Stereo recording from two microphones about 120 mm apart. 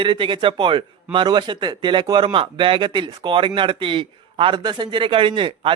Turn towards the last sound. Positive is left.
turn(degrees=-45)  # may be behind; listen again after turning